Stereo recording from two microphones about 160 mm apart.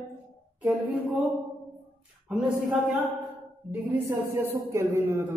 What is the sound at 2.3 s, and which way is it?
A man's voice, 5° right (ahead or behind).